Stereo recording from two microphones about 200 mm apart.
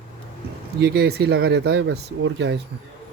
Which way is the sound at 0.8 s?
55° right (ahead or behind).